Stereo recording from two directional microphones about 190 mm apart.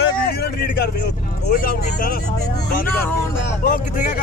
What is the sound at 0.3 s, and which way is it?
Vehicle, 55° left (ahead or behind).